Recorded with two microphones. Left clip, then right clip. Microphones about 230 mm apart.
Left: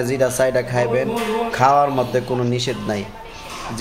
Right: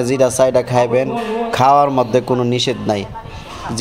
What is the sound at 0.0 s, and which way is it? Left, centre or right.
A man's voice, right.